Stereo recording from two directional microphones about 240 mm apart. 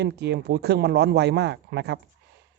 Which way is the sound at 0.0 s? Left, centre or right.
Right.